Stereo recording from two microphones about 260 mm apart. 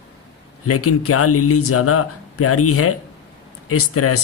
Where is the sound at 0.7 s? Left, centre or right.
Left.